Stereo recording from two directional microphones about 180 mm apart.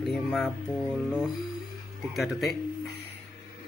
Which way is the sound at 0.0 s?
Centre (ahead or behind).